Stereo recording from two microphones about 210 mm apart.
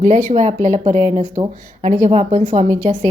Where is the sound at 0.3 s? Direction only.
35° right (ahead or behind).